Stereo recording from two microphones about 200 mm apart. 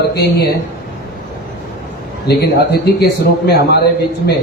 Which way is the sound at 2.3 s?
55° left (ahead or behind).